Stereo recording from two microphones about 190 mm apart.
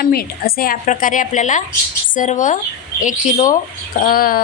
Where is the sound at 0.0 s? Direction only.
50° left (ahead or behind).